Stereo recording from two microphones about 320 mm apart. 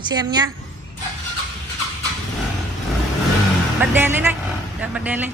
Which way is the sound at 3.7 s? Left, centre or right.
Centre.